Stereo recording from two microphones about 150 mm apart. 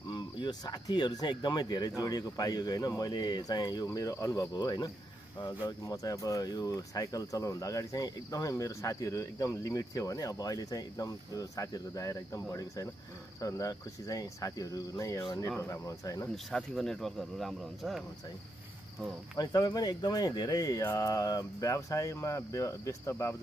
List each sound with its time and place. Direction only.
0.1 s speech: 30° left (ahead or behind)
16.5 s speech: 5° left (ahead or behind)
19.3 s speech: 25° left (ahead or behind)